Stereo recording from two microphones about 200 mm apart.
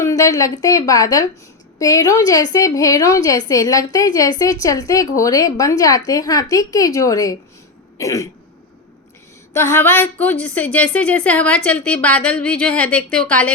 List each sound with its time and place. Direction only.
0.0 s a woman's voice: 15° left (ahead or behind)
9.5 s a woman's voice: 10° left (ahead or behind)